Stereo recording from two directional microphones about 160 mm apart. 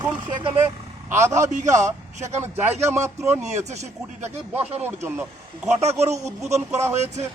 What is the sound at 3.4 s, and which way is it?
Speech, 45° right (ahead or behind).